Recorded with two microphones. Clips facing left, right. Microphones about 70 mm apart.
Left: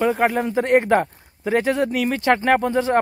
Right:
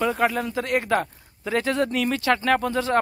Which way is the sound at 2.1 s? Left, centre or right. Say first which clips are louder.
Left 5 dB; left.